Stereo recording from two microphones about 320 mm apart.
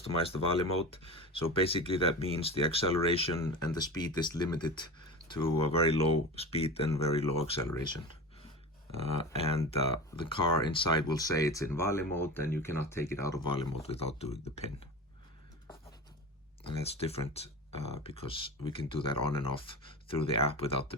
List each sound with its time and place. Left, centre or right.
0.0 s speech: centre
9.4 s speech: centre
16.8 s speech: centre